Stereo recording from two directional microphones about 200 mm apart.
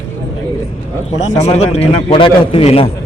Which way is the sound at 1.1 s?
35° left (ahead or behind).